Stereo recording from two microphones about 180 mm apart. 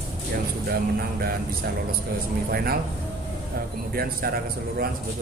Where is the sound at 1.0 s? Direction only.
60° right (ahead or behind).